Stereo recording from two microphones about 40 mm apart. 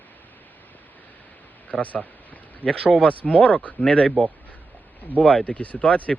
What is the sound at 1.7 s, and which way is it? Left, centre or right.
Speech, left.